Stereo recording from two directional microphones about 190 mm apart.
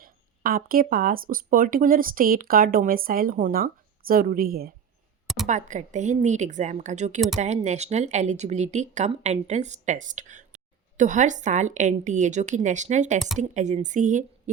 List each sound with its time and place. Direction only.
0.0 s speech: 50° right (ahead or behind)
5.5 s speech: 40° right (ahead or behind)